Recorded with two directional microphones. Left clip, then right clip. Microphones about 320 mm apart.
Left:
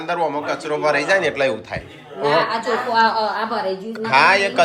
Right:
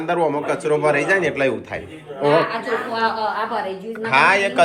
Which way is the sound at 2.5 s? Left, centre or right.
Left.